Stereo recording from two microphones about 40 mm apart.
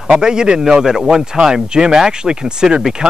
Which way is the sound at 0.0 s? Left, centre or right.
Centre.